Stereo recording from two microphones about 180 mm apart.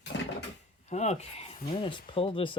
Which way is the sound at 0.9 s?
40° left (ahead or behind).